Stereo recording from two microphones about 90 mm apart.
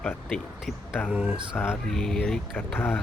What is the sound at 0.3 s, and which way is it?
Music, 5° left (ahead or behind).